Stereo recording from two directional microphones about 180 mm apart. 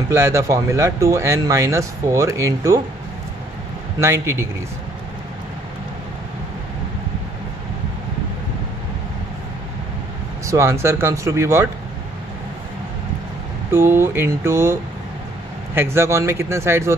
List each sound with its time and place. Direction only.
0.1 s speech: 15° right (ahead or behind)
4.0 s speech: 15° right (ahead or behind)
10.4 s speech: 15° right (ahead or behind)
13.7 s speech: 15° right (ahead or behind)